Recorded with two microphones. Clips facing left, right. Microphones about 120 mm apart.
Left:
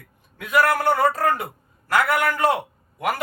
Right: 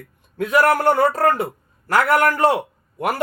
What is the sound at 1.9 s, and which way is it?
Speech, 40° right (ahead or behind).